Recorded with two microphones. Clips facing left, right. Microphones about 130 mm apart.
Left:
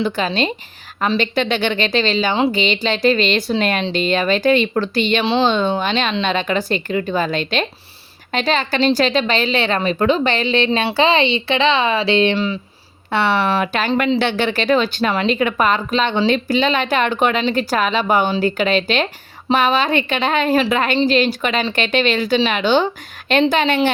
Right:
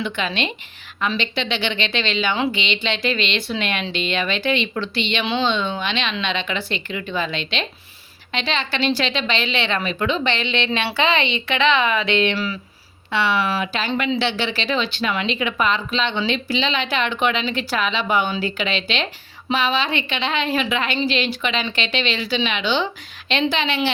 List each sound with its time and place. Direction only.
0.0 s a woman's voice: 35° left (ahead or behind)
13.1 s speech: 55° left (ahead or behind)